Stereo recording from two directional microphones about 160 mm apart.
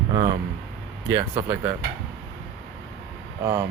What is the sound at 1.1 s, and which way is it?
Speech, 20° right (ahead or behind).